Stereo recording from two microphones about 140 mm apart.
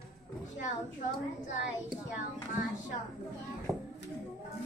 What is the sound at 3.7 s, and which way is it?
Music, centre (ahead or behind).